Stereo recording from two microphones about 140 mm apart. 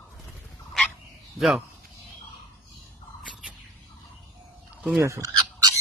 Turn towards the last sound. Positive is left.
turn(degrees=-20)  # may be behind; listen again after turning